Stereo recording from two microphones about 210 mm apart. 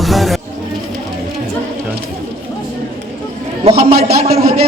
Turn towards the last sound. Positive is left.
turn(degrees=-30)  # may be behind; listen again after turning